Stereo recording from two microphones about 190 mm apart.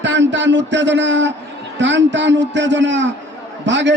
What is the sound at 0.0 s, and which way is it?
A man's voice, 70° right (ahead or behind).